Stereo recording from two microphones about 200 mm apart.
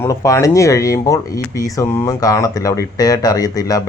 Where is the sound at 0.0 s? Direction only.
15° left (ahead or behind).